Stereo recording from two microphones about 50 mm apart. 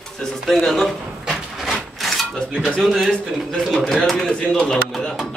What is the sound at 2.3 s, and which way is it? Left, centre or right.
Speech, centre.